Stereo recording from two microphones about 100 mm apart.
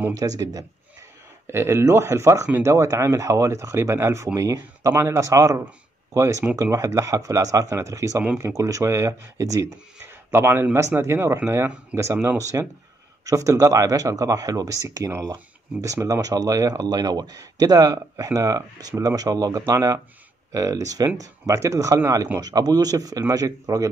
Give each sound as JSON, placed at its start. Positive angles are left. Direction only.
{"t": 0.1, "sound": "speech", "side_deg": -35}